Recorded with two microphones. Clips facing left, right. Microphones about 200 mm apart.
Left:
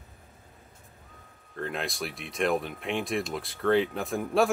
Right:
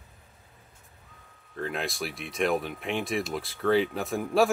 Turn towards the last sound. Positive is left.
turn(degrees=0)  # may be behind; listen again after turning